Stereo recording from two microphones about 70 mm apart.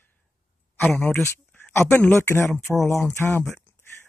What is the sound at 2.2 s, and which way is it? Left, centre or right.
Speech, left.